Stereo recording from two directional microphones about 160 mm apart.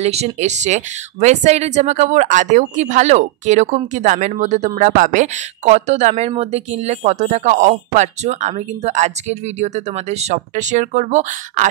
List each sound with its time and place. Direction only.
0.0 s a woman's voice: 40° right (ahead or behind)